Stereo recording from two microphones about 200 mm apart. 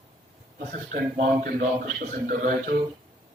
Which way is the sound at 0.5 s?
45° right (ahead or behind).